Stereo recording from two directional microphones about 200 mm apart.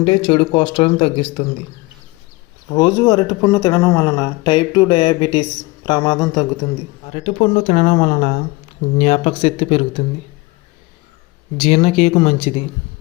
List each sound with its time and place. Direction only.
0.0 s speech: 25° left (ahead or behind)
2.6 s speech: 20° left (ahead or behind)
7.1 s speech: 30° left (ahead or behind)
11.5 s speech: 30° left (ahead or behind)